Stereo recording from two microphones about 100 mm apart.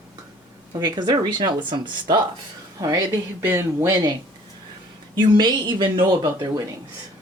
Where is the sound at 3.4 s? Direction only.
25° right (ahead or behind).